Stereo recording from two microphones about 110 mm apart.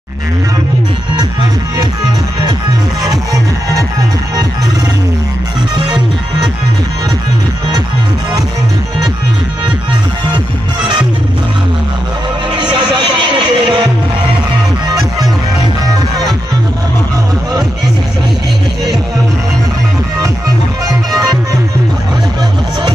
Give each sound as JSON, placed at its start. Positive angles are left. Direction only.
{"t": 5.9, "sound": "music", "side_deg": -45}
{"t": 12.5, "sound": "music", "side_deg": -45}
{"t": 21.1, "sound": "music", "side_deg": -35}